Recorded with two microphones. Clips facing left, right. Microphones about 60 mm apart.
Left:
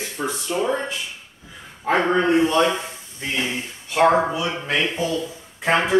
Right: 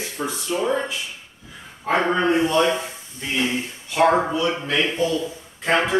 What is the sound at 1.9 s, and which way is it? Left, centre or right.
Speech, centre.